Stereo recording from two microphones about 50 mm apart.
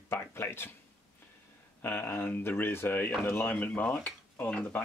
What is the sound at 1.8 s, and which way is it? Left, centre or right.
Speech, left.